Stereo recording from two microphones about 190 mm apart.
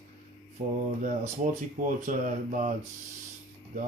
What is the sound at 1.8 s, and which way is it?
Mantra, 45° right (ahead or behind).